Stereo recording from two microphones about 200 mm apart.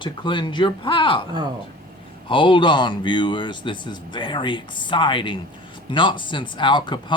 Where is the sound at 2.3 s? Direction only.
25° left (ahead or behind).